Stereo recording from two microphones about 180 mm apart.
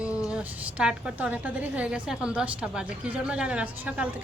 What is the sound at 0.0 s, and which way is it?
A woman's voice, 5° right (ahead or behind).